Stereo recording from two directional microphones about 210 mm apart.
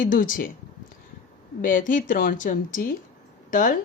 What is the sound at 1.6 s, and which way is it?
A woman's voice, 40° left (ahead or behind).